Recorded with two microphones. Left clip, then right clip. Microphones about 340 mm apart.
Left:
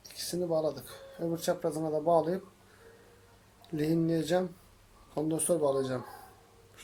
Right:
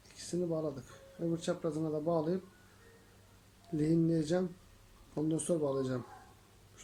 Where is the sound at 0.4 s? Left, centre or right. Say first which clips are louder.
Left 9 dB; left.